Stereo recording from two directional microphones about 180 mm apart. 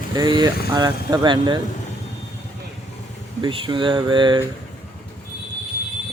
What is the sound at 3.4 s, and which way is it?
Speech, 30° right (ahead or behind).